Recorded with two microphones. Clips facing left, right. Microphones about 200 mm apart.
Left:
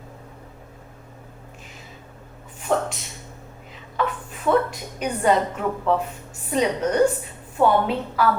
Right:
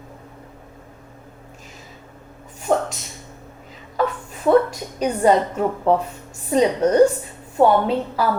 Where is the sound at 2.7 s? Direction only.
40° right (ahead or behind).